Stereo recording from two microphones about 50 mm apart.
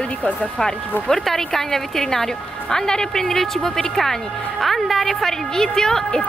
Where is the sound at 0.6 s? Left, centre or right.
Centre.